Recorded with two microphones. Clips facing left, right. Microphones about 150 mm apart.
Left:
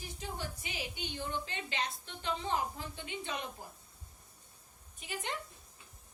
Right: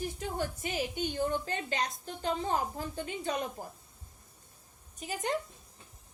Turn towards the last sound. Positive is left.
turn(degrees=-40)  # may be behind; listen again after turning